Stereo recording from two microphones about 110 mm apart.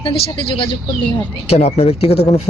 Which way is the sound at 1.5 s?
75° left (ahead or behind).